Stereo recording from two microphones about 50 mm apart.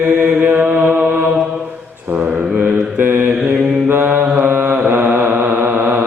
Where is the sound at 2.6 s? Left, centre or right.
Right.